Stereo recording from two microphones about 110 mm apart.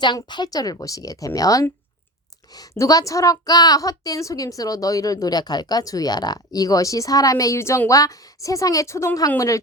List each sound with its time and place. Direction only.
0.0 s a woman's voice: 45° left (ahead or behind)